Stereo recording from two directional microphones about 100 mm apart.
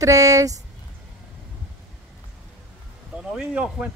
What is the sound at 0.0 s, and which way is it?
Speech, 35° right (ahead or behind).